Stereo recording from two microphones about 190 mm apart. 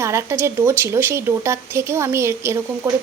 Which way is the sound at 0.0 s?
15° right (ahead or behind).